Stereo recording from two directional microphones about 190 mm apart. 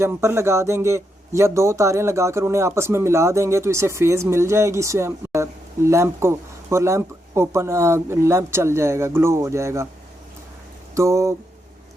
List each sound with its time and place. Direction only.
0.0 s a man's voice: 15° right (ahead or behind)
10.9 s a man's voice: 15° right (ahead or behind)